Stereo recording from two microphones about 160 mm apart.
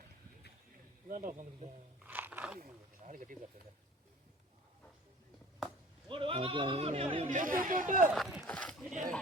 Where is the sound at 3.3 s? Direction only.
55° right (ahead or behind).